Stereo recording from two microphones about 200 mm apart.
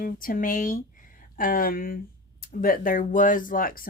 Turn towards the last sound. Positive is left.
turn(degrees=45)  # may be behind; listen again after turning